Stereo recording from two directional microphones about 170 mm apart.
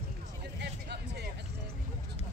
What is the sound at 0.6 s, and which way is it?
Music, 75° right (ahead or behind).